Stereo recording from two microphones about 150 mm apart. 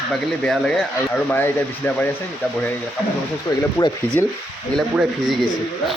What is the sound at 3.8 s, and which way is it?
Speech, 20° left (ahead or behind).